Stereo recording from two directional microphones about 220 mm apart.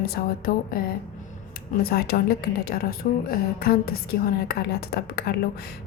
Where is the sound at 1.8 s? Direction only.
45° left (ahead or behind).